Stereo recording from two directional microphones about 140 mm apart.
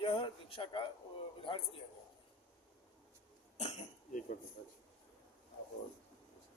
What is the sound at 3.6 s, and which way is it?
Cough, 60° left (ahead or behind).